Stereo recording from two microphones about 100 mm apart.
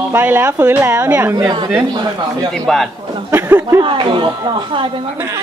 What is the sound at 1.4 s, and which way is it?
Speech, 45° right (ahead or behind).